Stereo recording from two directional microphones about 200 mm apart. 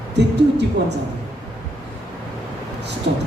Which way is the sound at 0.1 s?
60° right (ahead or behind).